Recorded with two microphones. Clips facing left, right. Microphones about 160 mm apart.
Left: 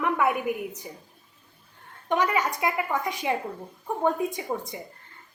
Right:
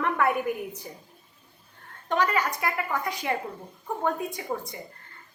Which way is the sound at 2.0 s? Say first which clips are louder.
Left 1 dB; 15° left (ahead or behind).